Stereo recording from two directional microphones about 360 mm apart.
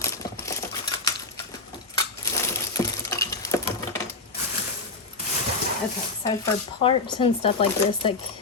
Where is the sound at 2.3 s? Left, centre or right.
Centre.